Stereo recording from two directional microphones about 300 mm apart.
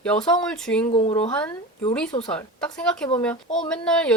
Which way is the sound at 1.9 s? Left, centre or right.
Centre.